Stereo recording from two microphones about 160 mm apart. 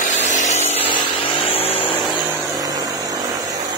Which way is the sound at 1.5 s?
35° left (ahead or behind).